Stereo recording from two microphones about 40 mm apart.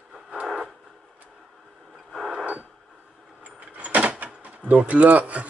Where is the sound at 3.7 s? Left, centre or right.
Right.